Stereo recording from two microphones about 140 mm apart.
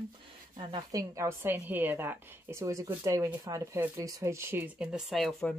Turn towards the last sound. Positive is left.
turn(degrees=0)  # may be behind; listen again after turning